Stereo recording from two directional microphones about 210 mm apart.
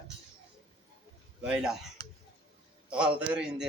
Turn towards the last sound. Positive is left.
turn(degrees=-5)  # may be behind; listen again after turning